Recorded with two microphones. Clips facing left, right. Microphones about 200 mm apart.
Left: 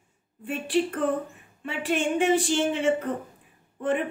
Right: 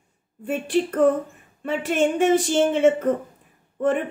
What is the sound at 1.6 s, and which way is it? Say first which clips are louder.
Speech: right 5 dB; 45° right (ahead or behind).